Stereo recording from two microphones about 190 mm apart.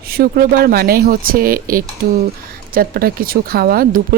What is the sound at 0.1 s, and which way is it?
Speech, 55° right (ahead or behind).